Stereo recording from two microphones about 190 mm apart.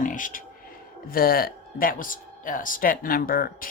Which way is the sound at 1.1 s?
50° left (ahead or behind).